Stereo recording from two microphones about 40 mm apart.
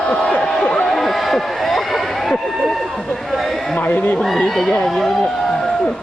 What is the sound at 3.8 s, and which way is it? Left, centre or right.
Speech, left.